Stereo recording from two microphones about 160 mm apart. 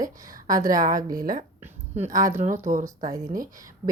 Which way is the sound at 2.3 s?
50° right (ahead or behind).